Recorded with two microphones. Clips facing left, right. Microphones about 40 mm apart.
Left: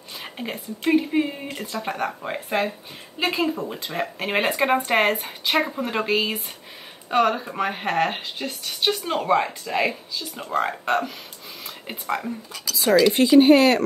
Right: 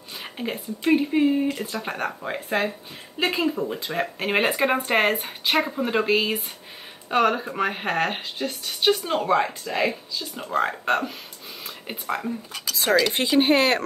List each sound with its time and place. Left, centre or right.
0.1 s speech: centre
9.0 s speech: centre
9.3 s speech: centre
9.8 s speech: centre
10.4 s speech: centre
11.6 s a sound: centre
12.5 s speech: right